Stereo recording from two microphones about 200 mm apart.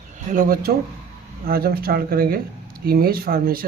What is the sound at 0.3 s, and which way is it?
Speech, 45° right (ahead or behind).